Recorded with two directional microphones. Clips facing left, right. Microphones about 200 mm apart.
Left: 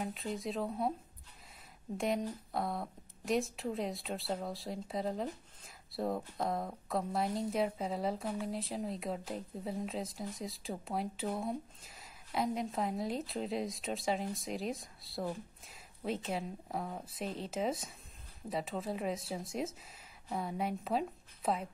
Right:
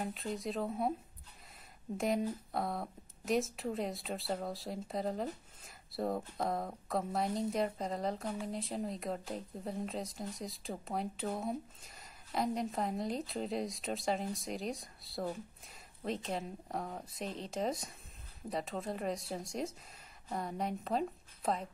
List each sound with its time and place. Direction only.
0.0 s speech: centre (ahead or behind)
2.0 s a woman's voice: centre (ahead or behind)